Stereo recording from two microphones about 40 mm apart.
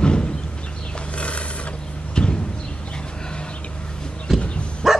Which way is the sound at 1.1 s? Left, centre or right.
Left.